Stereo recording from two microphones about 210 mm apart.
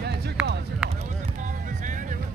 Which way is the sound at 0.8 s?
5° right (ahead or behind).